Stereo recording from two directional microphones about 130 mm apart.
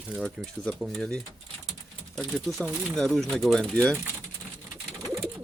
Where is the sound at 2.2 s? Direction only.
20° right (ahead or behind).